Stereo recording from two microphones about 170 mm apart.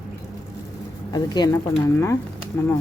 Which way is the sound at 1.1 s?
25° left (ahead or behind).